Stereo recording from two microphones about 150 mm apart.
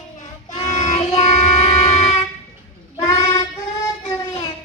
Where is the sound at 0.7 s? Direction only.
50° left (ahead or behind).